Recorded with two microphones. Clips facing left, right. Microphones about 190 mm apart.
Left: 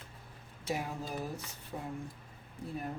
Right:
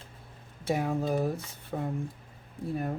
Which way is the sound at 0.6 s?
60° right (ahead or behind).